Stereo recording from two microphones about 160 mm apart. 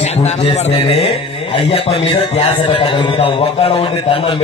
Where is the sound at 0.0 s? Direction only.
45° left (ahead or behind).